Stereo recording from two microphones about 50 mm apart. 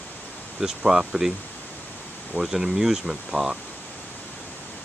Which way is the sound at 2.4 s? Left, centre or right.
Centre.